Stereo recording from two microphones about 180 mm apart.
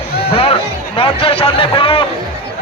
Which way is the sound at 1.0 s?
30° left (ahead or behind).